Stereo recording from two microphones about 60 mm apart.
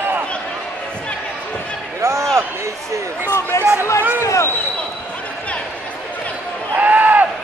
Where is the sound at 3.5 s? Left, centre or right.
Left.